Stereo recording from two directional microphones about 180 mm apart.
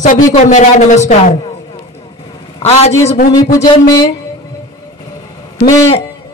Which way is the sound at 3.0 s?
35° left (ahead or behind).